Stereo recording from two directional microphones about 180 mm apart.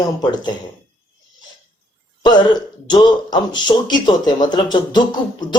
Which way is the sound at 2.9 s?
25° left (ahead or behind).